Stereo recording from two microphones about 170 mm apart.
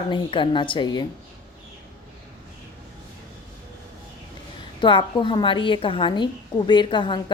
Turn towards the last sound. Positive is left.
turn(degrees=25)  # may be behind; listen again after turning